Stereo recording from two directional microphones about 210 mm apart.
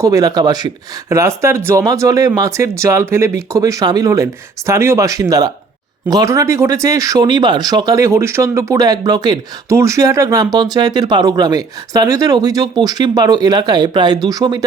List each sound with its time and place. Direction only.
0.0 s speech: 15° right (ahead or behind)